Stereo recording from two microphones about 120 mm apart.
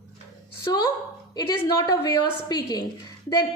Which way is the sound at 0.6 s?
35° left (ahead or behind).